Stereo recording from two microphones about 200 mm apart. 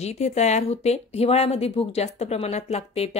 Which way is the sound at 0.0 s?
35° left (ahead or behind).